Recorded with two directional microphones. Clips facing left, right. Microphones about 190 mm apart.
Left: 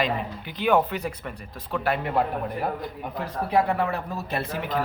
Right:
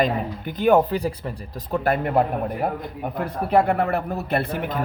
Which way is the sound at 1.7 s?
45° right (ahead or behind).